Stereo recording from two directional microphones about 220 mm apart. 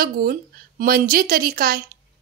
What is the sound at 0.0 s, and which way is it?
A woman's voice, 40° right (ahead or behind).